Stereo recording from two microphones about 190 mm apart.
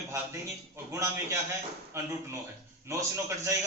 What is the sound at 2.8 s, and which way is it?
Speech, 15° right (ahead or behind).